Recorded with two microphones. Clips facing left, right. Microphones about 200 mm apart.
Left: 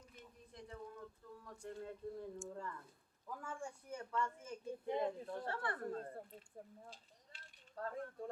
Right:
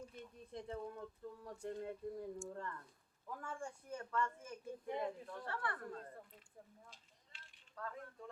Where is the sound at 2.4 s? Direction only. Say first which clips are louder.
Right 1 dB; 5° left (ahead or behind).